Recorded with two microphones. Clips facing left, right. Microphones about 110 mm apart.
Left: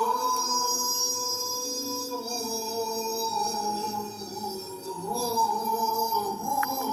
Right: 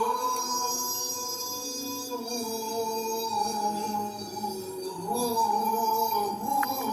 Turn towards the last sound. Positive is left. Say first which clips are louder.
# even
turn(degrees=-10)  # may be behind; listen again after turning